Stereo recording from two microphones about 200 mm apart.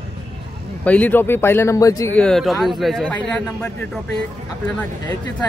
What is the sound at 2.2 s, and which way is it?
A man's voice, centre (ahead or behind).